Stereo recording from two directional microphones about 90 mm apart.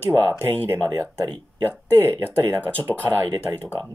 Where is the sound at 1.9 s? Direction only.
25° right (ahead or behind).